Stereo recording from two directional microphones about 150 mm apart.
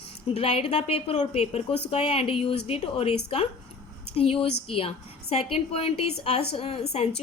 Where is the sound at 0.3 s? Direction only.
40° left (ahead or behind).